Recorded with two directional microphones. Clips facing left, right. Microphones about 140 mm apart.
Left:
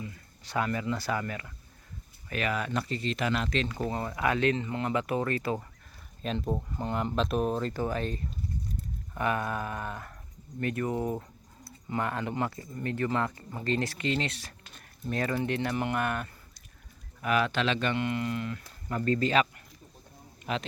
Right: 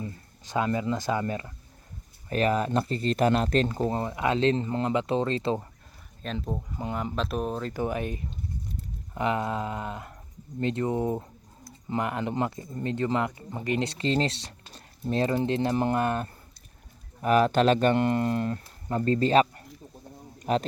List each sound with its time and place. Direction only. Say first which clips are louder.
0.4 s speech: right 3 dB; 20° right (ahead or behind); by 3.8 s 40° right (ahead or behind)
3.8 s speech: right 4 dB; 30° right (ahead or behind)
6.2 s speech: left 2 dB; 5° left (ahead or behind)
6.7 s speech: even; 5° right (ahead or behind)
7.7 s speech: right 2 dB; 15° right (ahead or behind); by 18.6 s 40° right (ahead or behind)
18.9 s a man's voice: right 4 dB; 30° right (ahead or behind)